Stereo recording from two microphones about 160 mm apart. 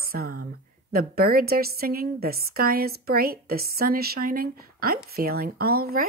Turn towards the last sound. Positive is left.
turn(degrees=-70)  # may be behind; listen again after turning